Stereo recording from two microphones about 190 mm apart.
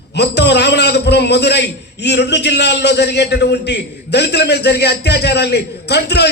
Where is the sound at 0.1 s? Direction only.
65° left (ahead or behind).